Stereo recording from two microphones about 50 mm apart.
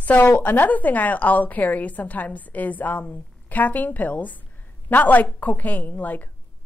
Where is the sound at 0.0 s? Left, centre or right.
Left.